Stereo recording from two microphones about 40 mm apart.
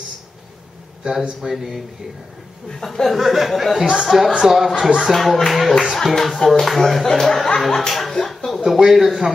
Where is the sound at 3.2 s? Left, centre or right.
Centre.